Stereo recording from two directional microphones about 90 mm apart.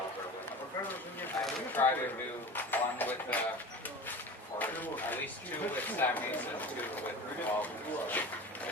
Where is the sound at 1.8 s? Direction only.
25° left (ahead or behind).